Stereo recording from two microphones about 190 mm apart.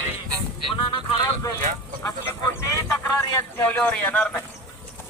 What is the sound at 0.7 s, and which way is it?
Speech, 25° left (ahead or behind).